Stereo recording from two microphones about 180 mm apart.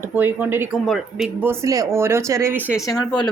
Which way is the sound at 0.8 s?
Centre (ahead or behind).